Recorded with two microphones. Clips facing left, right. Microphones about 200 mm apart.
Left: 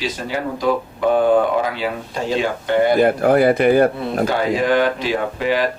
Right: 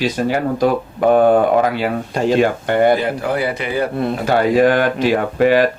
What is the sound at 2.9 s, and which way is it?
A man's voice, 50° left (ahead or behind).